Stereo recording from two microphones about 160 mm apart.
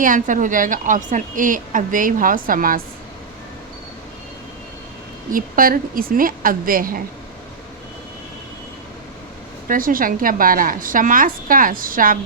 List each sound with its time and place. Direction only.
0.0 s a woman's voice: 55° right (ahead or behind)
5.3 s a woman's voice: 60° right (ahead or behind)
9.6 s a woman's voice: 60° right (ahead or behind)